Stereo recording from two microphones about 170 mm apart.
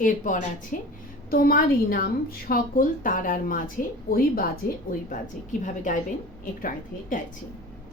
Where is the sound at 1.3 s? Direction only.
60° left (ahead or behind).